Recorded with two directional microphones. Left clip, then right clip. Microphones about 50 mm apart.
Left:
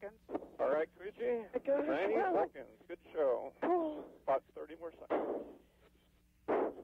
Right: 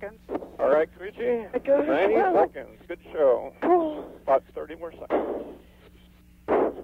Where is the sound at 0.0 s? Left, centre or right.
Right.